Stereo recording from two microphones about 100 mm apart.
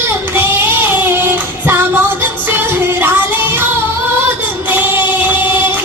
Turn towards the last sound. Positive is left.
turn(degrees=-20)  # may be behind; listen again after turning